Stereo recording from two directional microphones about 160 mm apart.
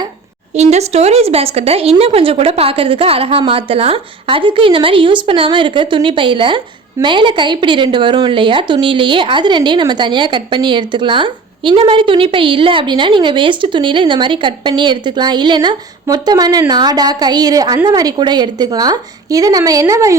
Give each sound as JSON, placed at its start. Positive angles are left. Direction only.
{"t": 0.5, "sound": "a woman's voice", "side_deg": -45}